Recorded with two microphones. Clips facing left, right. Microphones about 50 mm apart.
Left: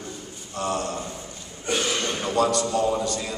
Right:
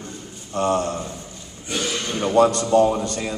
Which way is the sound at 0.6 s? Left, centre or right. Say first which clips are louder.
Right 6 dB; right.